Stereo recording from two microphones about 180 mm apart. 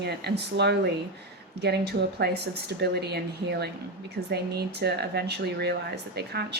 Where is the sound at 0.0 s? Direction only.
65° right (ahead or behind).